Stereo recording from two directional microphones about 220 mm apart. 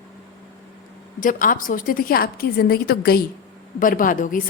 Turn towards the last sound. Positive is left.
turn(degrees=35)  # may be behind; listen again after turning